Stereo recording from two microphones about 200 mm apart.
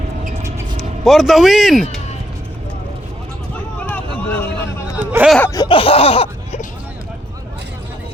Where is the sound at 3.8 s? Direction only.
10° left (ahead or behind).